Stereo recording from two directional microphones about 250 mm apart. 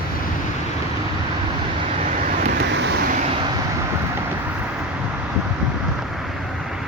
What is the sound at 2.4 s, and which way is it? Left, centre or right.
Vehicle, right.